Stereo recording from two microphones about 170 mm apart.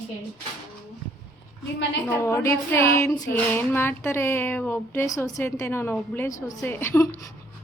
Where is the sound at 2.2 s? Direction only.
15° left (ahead or behind).